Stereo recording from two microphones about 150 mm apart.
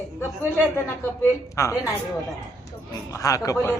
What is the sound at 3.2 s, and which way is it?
Speech, 20° left (ahead or behind).